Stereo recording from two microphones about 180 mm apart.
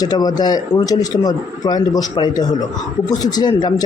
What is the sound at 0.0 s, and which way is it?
Speech, 20° left (ahead or behind).